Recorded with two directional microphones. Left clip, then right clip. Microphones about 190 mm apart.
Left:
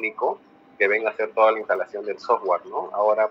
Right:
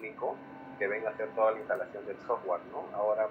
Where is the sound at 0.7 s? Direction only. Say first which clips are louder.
Left 12 dB; 70° left (ahead or behind).